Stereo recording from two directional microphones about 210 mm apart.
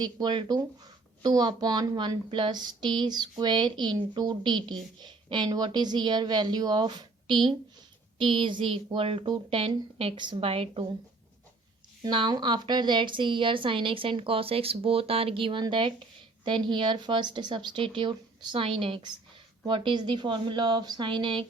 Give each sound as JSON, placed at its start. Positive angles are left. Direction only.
{"t": 0.0, "sound": "a woman's voice", "side_deg": -20}
{"t": 12.0, "sound": "a woman's voice", "side_deg": -20}